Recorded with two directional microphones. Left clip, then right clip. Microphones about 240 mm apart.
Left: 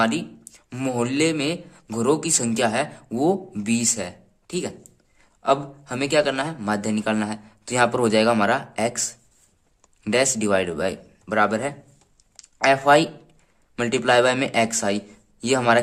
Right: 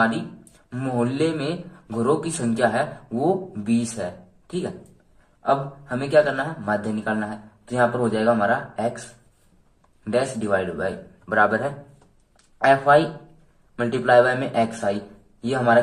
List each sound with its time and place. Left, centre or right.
0.7 s a man's voice: left
5.4 s a man's voice: left
10.0 s a man's voice: left